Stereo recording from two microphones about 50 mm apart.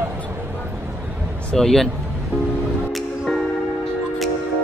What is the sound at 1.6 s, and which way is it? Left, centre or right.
Speech, centre.